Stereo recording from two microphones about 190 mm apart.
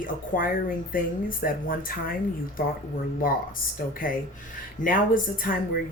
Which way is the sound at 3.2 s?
45° left (ahead or behind).